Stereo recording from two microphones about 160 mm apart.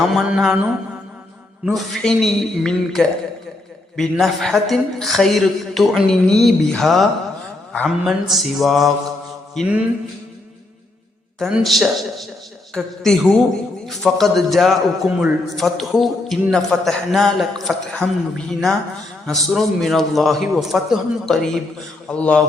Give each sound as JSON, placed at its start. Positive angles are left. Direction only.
{"t": 0.1, "sound": "a man's voice", "side_deg": -5}
{"t": 1.6, "sound": "a man's voice", "side_deg": 0}
{"t": 11.3, "sound": "a man's voice", "side_deg": 0}